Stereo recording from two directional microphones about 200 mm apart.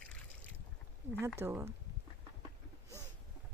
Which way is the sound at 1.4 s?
10° right (ahead or behind).